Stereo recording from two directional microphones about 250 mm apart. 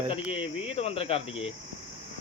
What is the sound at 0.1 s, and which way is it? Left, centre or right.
Speech, left.